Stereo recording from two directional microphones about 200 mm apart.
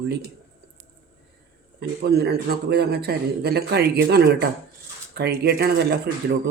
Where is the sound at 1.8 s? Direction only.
55° right (ahead or behind).